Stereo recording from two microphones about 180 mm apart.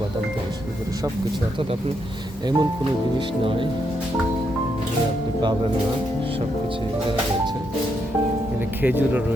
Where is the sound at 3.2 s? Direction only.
30° right (ahead or behind).